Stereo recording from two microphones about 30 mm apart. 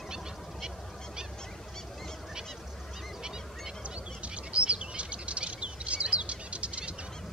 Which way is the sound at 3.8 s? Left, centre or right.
Right.